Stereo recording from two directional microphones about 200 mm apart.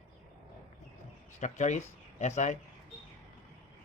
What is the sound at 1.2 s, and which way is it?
Speech, 35° left (ahead or behind).